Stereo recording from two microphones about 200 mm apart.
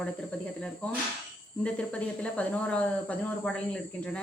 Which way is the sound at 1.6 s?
5° left (ahead or behind).